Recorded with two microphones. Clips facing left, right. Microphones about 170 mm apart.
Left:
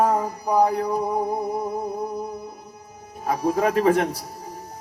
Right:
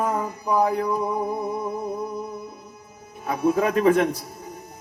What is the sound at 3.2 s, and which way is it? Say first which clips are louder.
A man's voice: even; 35° left (ahead or behind).